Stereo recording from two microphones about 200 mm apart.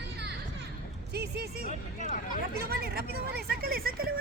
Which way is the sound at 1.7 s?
40° left (ahead or behind).